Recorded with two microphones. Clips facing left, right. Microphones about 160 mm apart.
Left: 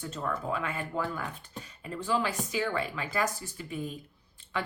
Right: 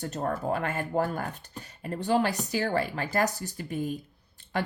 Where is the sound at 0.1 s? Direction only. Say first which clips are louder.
Right 3 dB; 45° right (ahead or behind).